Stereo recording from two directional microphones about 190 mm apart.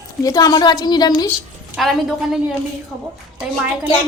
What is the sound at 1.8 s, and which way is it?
Speech, centre (ahead or behind).